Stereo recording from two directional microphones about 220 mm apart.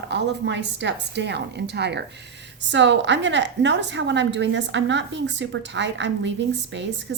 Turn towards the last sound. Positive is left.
turn(degrees=-55)  # may be behind; listen again after turning